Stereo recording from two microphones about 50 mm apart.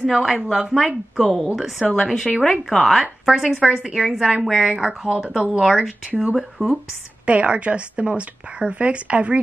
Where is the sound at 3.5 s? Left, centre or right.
Centre.